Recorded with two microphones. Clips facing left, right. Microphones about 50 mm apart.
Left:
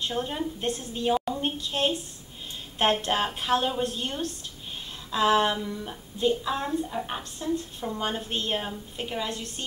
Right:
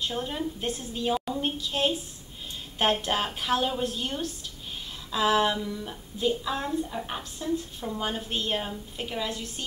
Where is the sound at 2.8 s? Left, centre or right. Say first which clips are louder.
Left 1 dB; centre.